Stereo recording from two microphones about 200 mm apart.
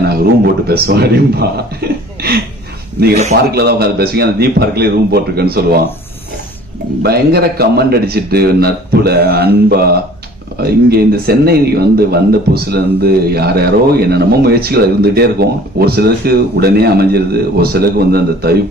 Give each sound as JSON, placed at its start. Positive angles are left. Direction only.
{"t": 0.0, "sound": "speech", "side_deg": -50}
{"t": 1.8, "sound": "chuckle", "side_deg": -55}
{"t": 3.5, "sound": "speech", "side_deg": -50}
{"t": 7.0, "sound": "speech", "side_deg": -50}